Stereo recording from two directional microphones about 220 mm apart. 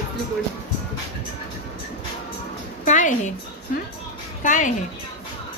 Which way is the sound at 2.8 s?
35° left (ahead or behind).